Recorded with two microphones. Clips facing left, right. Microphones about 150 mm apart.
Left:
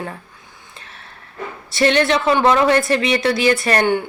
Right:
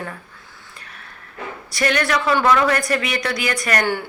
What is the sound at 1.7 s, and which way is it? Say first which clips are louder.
A woman's voice: left 5 dB; 25° left (ahead or behind).